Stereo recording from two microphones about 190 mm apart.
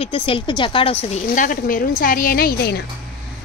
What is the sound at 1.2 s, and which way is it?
A woman's voice, 45° left (ahead or behind).